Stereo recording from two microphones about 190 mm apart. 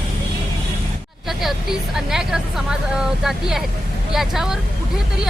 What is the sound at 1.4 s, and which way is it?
Speech, centre (ahead or behind).